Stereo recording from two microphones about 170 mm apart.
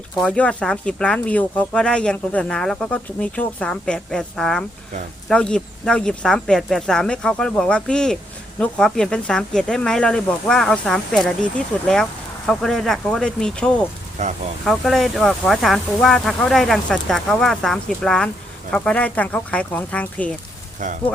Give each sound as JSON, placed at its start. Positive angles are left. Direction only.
{"t": 0.2, "sound": "speech", "side_deg": 5}
{"t": 14.2, "sound": "speech", "side_deg": -45}
{"t": 14.6, "sound": "speech", "side_deg": 0}
{"t": 20.8, "sound": "speech", "side_deg": -45}